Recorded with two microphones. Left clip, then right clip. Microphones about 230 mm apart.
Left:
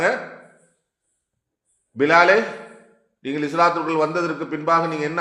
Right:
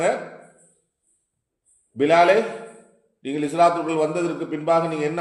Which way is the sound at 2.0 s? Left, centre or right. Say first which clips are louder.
Left 1 dB; left.